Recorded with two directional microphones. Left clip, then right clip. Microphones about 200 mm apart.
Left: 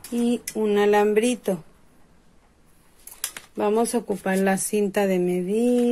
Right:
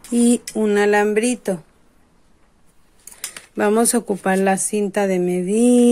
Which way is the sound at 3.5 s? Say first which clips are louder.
Right 5 dB; 35° right (ahead or behind).